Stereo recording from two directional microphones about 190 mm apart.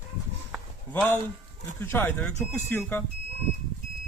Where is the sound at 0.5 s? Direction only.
10° left (ahead or behind).